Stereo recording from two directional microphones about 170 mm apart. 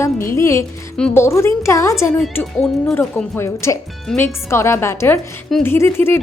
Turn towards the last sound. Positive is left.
turn(degrees=15)  # may be behind; listen again after turning